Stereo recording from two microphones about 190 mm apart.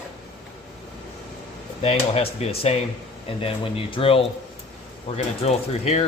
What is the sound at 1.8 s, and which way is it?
A man's voice, 30° left (ahead or behind).